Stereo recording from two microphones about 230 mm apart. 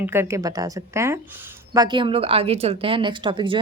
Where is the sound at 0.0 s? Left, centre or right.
Centre.